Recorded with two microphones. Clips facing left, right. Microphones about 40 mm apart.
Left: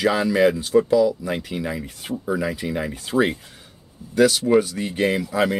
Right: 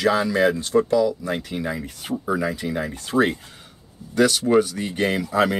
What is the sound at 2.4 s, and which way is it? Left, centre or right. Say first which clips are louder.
Speech: even; centre.